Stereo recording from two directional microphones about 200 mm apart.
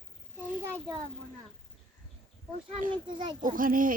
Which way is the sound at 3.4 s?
45° right (ahead or behind).